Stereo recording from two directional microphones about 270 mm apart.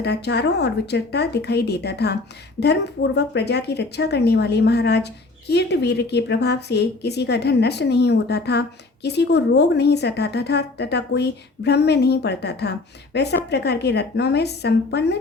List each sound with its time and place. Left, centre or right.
0.0 s a woman's voice: left